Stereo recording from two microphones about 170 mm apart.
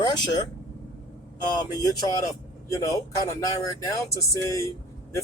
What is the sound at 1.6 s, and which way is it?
Speech, 25° left (ahead or behind).